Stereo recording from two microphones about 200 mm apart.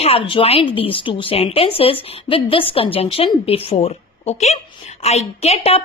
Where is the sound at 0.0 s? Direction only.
30° left (ahead or behind).